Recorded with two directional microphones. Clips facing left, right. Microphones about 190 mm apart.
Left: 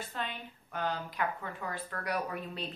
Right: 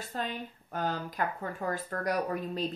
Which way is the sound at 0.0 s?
40° right (ahead or behind).